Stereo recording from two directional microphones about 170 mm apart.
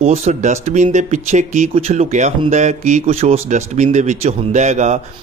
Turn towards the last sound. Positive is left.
turn(degrees=-40)  # may be behind; listen again after turning